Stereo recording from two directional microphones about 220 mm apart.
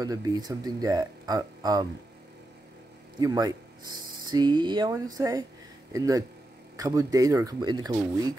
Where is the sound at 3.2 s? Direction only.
15° right (ahead or behind).